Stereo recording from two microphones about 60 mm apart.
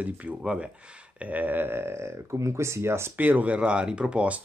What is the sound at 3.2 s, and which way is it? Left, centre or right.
Speech, right.